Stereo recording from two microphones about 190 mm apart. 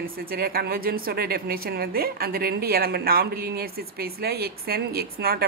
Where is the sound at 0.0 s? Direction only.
50° right (ahead or behind).